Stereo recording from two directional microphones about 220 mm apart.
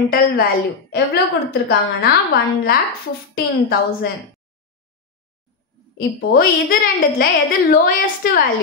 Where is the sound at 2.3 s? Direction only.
40° left (ahead or behind).